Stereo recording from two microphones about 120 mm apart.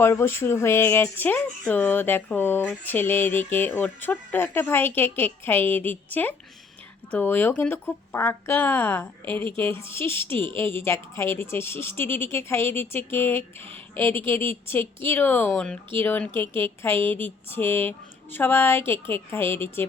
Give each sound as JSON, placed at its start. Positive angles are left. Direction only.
{"t": 0.0, "sound": "speech", "side_deg": 20}